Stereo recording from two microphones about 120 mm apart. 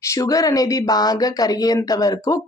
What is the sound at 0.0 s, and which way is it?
Speech, 30° left (ahead or behind).